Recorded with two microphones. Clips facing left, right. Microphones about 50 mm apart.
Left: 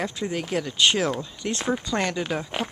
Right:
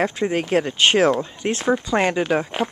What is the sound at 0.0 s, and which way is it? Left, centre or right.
Speech, right.